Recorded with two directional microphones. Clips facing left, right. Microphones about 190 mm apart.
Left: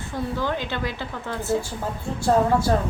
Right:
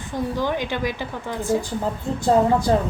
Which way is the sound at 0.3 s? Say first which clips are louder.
Right 3 dB; 15° right (ahead or behind).